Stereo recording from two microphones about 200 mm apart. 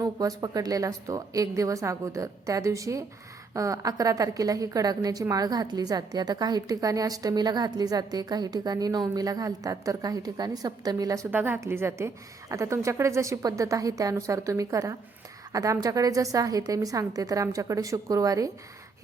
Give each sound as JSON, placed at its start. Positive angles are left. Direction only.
{"t": 0.0, "sound": "a woman's voice", "side_deg": -15}